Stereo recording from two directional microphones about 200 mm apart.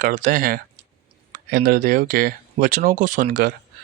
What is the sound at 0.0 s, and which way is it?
Speech, 40° right (ahead or behind).